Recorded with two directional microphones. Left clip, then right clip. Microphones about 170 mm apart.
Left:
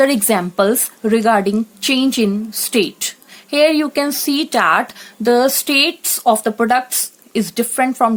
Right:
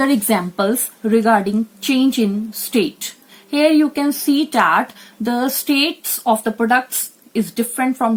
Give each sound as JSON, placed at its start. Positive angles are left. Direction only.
{"t": 0.0, "sound": "a woman's voice", "side_deg": 70}